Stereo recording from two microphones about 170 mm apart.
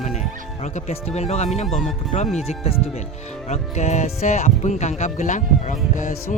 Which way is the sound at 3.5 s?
40° left (ahead or behind).